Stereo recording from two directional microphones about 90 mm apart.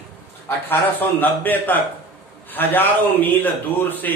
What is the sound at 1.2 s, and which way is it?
A man's voice, 20° left (ahead or behind).